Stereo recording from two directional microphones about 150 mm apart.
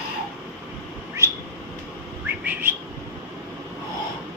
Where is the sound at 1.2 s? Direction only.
20° right (ahead or behind).